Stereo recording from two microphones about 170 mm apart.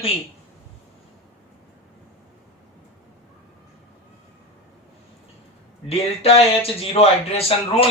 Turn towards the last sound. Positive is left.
turn(degrees=35)  # may be behind; listen again after turning